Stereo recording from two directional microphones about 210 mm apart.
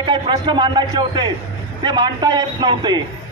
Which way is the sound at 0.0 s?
20° right (ahead or behind).